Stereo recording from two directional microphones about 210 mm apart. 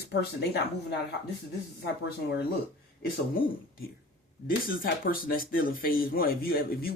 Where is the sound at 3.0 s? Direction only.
45° left (ahead or behind).